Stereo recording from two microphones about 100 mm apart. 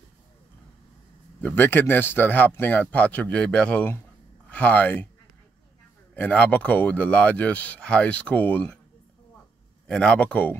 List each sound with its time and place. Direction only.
1.4 s speech: 20° left (ahead or behind)
6.1 s speech: 15° left (ahead or behind)
9.8 s speech: 10° left (ahead or behind)